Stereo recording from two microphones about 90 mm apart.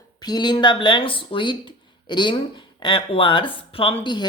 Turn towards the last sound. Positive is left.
turn(degrees=60)  # may be behind; listen again after turning